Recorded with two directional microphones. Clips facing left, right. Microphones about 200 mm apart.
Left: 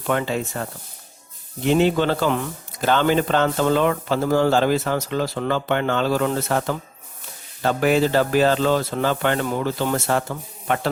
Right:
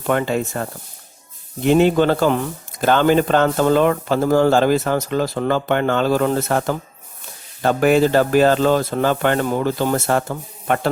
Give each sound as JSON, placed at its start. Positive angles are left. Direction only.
{"t": 0.1, "sound": "speech", "side_deg": -50}